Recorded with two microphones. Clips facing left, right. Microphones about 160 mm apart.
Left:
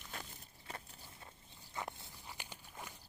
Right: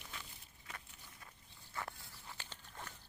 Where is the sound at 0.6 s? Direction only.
30° left (ahead or behind).